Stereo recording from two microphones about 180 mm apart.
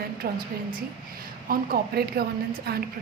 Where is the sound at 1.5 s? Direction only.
55° right (ahead or behind).